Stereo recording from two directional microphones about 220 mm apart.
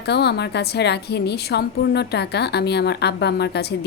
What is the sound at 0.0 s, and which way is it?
A woman's voice, 50° left (ahead or behind).